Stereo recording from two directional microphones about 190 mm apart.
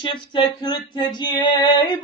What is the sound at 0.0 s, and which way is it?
Mantra, 25° left (ahead or behind).